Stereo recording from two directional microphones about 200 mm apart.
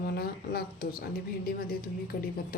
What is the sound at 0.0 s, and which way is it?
A woman's voice, 50° left (ahead or behind).